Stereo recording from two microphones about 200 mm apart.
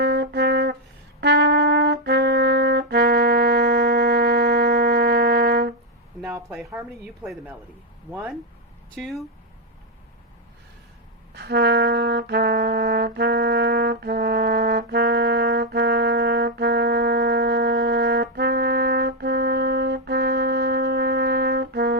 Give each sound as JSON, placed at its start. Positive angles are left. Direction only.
{"t": 0.0, "sound": "brass instrument", "side_deg": -55}
{"t": 6.2, "sound": "speech", "side_deg": -10}
{"t": 9.0, "sound": "speech", "side_deg": 0}
{"t": 11.3, "sound": "music", "side_deg": -55}